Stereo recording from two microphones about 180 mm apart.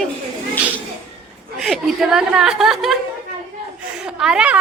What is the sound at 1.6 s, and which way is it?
A woman's voice, centre (ahead or behind).